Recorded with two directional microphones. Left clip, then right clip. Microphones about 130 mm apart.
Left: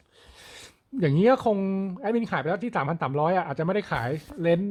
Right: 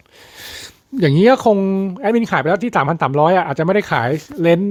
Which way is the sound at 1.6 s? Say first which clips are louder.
Right 11 dB; 25° right (ahead or behind).